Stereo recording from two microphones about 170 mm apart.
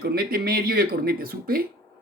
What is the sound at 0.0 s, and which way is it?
Speech, 65° right (ahead or behind).